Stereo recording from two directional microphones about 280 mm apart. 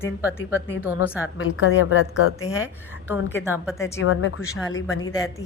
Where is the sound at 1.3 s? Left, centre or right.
Left.